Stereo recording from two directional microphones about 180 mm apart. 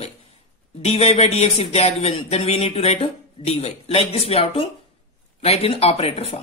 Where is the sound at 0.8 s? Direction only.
35° left (ahead or behind).